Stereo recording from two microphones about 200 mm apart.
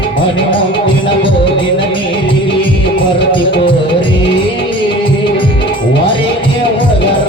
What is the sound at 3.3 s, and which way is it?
Music, 25° left (ahead or behind).